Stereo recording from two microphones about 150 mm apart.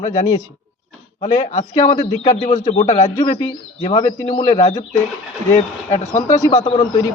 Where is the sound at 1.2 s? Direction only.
60° left (ahead or behind).